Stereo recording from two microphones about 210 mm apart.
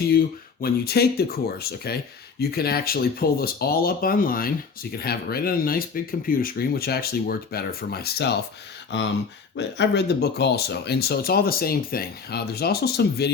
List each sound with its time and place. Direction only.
0.1 s speech: 45° left (ahead or behind)